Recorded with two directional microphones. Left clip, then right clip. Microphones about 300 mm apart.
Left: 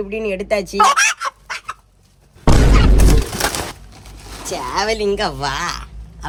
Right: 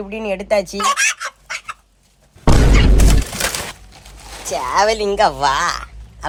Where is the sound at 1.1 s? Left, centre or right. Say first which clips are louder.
Left 2 dB; centre.